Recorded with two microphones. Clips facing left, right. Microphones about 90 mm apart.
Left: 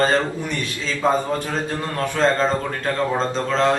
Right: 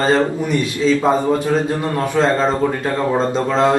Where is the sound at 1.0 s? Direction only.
10° right (ahead or behind).